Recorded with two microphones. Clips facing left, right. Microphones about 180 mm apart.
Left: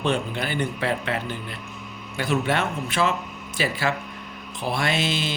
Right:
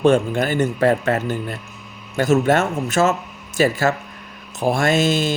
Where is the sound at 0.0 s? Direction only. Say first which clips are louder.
Right 9 dB; 45° right (ahead or behind).